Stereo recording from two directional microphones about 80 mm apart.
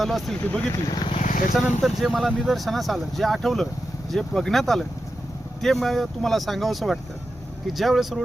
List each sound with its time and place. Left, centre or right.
0.0 s speech: centre
0.7 s speech: left
1.5 s speech: centre